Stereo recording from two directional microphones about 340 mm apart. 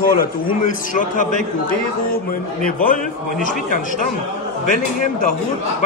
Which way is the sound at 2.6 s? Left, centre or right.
Left.